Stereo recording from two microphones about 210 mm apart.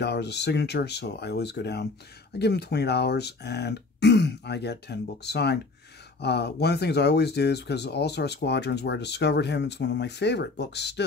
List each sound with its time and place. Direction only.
0.0 s speech: 55° left (ahead or behind)